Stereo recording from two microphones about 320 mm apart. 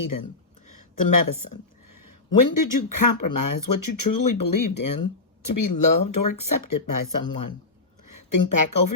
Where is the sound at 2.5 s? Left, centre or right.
Left.